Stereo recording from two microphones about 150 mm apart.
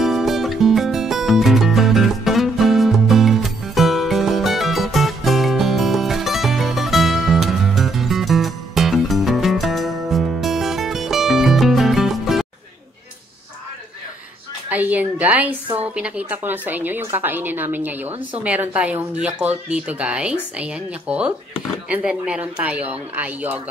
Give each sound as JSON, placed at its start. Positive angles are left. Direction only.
{"t": 0.0, "sound": "music", "side_deg": 0}
{"t": 14.7, "sound": "a sound", "side_deg": -10}
{"t": 15.8, "sound": "a woman's voice", "side_deg": -10}